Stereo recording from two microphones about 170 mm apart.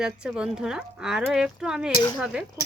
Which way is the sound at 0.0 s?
5° right (ahead or behind).